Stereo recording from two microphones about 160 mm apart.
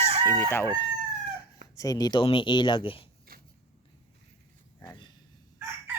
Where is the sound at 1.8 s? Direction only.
20° left (ahead or behind).